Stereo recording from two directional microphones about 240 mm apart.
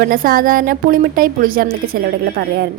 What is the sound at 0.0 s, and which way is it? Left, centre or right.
A woman's voice, right.